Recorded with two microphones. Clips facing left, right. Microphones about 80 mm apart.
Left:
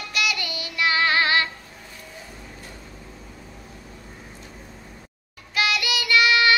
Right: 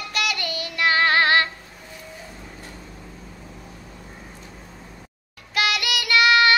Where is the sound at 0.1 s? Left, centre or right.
Right.